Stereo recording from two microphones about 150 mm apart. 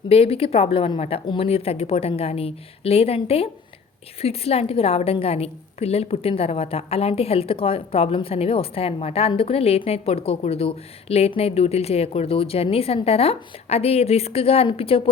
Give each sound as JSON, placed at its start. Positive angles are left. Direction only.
{"t": 0.1, "sound": "a woman's voice", "side_deg": 40}